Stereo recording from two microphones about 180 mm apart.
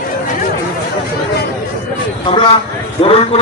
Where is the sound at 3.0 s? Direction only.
35° left (ahead or behind).